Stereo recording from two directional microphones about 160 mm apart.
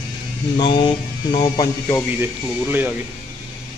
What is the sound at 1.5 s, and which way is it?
Speech, 20° left (ahead or behind).